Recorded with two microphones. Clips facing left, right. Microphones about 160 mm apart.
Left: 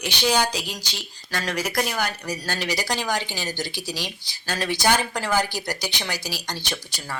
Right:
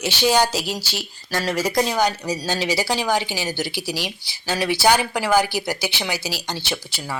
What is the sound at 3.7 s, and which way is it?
Speech, 20° left (ahead or behind).